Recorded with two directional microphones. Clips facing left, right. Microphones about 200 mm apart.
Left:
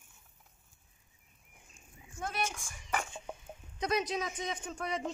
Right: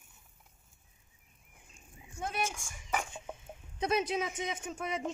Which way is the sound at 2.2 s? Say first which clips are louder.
Right 1 dB; 10° right (ahead or behind).